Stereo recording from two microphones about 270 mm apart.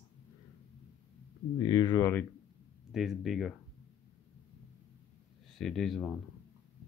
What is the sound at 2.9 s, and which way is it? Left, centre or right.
Speech, centre.